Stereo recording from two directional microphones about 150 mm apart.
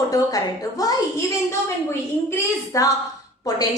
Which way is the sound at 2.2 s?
20° left (ahead or behind).